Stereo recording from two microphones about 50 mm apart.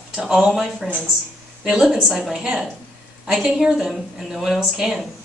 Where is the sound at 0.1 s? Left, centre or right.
Centre.